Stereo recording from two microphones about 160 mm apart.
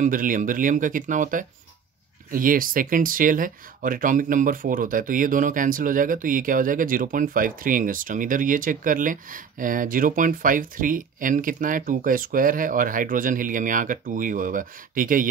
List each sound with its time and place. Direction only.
0.0 s speech: 55° right (ahead or behind)